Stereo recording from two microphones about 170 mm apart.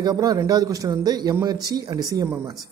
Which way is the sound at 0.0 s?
20° right (ahead or behind).